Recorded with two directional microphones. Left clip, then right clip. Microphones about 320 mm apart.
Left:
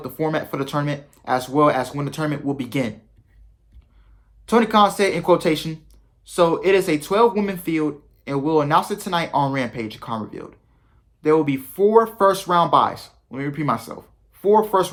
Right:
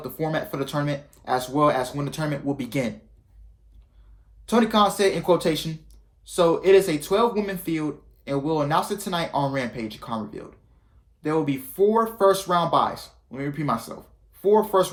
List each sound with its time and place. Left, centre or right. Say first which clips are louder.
0.0 s speech: left 4 dB; centre
4.4 s speech: left 4 dB; centre